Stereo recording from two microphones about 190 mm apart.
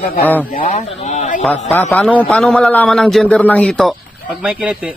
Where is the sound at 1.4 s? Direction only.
5° left (ahead or behind).